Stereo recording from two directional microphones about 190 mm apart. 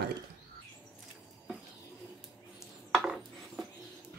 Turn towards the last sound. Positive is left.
turn(degrees=0)  # may be behind; listen again after turning